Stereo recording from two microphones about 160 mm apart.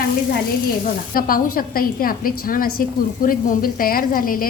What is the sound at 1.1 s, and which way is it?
A woman's voice, 65° left (ahead or behind).